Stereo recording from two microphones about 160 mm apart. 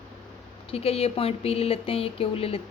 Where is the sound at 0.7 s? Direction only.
40° left (ahead or behind).